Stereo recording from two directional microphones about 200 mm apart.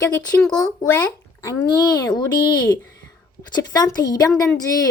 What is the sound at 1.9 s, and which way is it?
A woman's voice, 20° left (ahead or behind).